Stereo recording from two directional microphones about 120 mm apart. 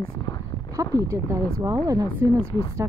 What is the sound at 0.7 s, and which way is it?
Speech, 30° right (ahead or behind).